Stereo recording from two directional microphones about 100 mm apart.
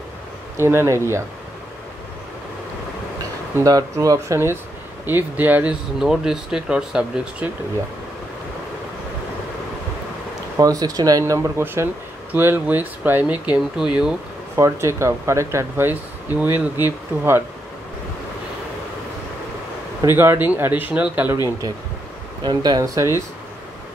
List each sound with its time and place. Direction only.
0.6 s speech: 25° right (ahead or behind)
3.5 s speech: 30° right (ahead or behind); by 7.5 s 10° right (ahead or behind)
10.6 s speech: 35° right (ahead or behind); by 14.1 s 10° right (ahead or behind)
14.5 s speech: 30° right (ahead or behind)
20.1 s speech: 25° right (ahead or behind)
22.4 s speech: 45° right (ahead or behind); by 23.2 s 30° right (ahead or behind)